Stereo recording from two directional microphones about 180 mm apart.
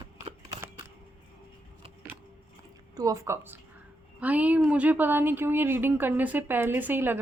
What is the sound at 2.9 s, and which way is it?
Speech, 15° right (ahead or behind).